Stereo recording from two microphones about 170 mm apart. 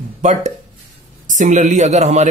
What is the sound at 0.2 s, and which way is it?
Speech, 45° right (ahead or behind).